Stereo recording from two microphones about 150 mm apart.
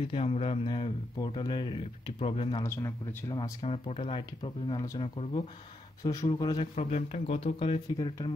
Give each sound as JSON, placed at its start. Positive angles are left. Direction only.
{"t": 0.1, "sound": "speech", "side_deg": 40}
{"t": 2.5, "sound": "a man's voice", "side_deg": 20}
{"t": 3.6, "sound": "speech", "side_deg": 40}
{"t": 4.4, "sound": "a man's voice", "side_deg": 30}
{"t": 6.7, "sound": "speech", "side_deg": 50}